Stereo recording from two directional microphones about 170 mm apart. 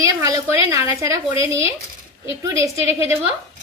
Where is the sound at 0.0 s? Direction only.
20° right (ahead or behind).